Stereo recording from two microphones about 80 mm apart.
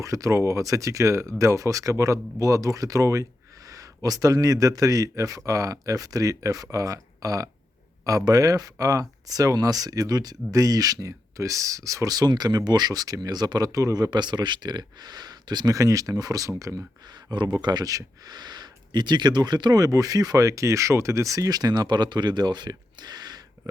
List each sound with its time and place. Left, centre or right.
0.0 s speech: right
17.3 s speech: right